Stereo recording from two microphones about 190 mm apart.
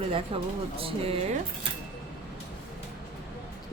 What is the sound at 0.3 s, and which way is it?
A woman's voice, 30° right (ahead or behind).